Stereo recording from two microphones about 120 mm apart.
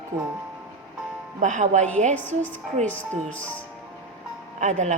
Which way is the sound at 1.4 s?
90° right.